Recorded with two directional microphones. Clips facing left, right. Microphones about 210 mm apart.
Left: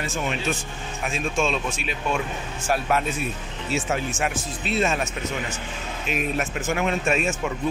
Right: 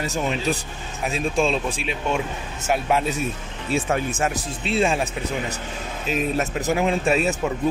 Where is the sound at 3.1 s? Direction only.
40° right (ahead or behind).